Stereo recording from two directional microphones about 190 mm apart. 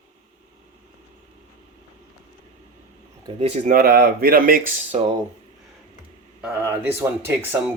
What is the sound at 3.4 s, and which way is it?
Speech, 40° right (ahead or behind).